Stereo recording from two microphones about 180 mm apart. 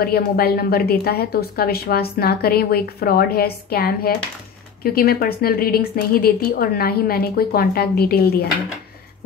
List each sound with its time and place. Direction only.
0.0 s a woman's voice: 60° left (ahead or behind)